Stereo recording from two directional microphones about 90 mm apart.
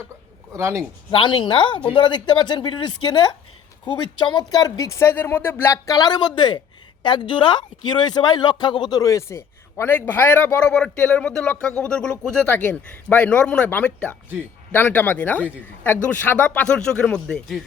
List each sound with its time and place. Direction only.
0.5 s speech: 30° right (ahead or behind)
1.1 s a woman's voice: 65° left (ahead or behind); by 4.9 s 45° left (ahead or behind)
4.9 s speech: 25° left (ahead or behind); by 9.0 s 55° left (ahead or behind)
9.0 s a man's voice: 35° left (ahead or behind); by 10.8 s 20° left (ahead or behind)
10.8 s a man's voice: 10° left (ahead or behind)